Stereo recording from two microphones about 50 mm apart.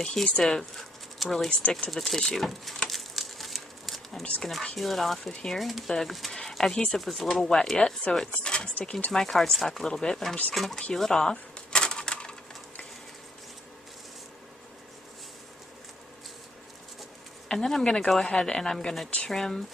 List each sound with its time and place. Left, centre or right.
0.0 s speech: centre
2.9 s crumpling: centre
4.4 s speech: centre; by 8.9 s left
9.1 s speech: centre
10.8 s a sound: centre
17.5 s speech: centre